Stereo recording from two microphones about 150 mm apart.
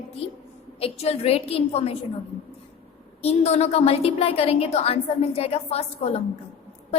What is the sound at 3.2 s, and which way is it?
A woman's voice, 45° left (ahead or behind).